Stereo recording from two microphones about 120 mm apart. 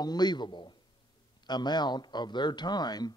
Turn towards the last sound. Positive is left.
turn(degrees=35)  # may be behind; listen again after turning